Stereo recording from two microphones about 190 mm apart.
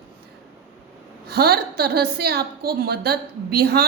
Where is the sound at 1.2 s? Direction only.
55° right (ahead or behind).